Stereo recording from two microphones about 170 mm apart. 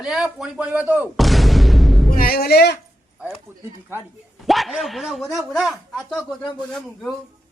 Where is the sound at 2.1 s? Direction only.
60° left (ahead or behind).